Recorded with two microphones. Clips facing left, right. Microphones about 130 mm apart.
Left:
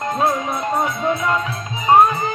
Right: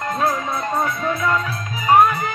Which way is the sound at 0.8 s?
20° left (ahead or behind).